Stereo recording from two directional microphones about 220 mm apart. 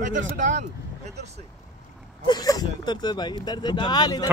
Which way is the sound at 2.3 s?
15° left (ahead or behind).